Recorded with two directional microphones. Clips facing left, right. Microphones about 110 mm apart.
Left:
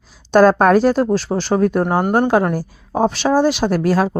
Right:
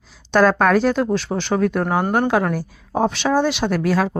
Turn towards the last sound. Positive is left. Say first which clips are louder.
# left 3 dB
turn(degrees=40)  # may be behind; listen again after turning